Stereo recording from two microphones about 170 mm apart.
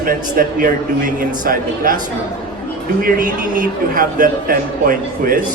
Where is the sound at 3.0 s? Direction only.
55° right (ahead or behind).